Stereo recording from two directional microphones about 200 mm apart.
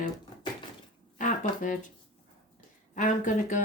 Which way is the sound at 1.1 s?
40° left (ahead or behind).